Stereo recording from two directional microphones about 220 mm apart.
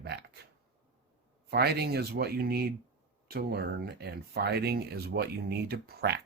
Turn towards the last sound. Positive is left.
turn(degrees=-50)  # may be behind; listen again after turning